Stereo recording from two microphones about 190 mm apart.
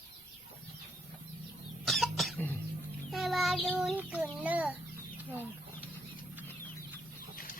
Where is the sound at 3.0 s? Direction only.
Centre (ahead or behind).